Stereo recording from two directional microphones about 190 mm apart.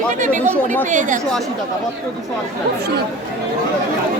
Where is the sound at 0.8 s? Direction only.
40° right (ahead or behind).